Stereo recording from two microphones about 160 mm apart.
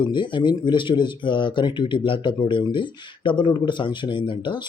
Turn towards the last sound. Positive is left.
turn(degrees=30)  # may be behind; listen again after turning